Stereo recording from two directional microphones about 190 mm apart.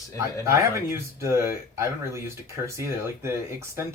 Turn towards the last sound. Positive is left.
turn(degrees=-15)  # may be behind; listen again after turning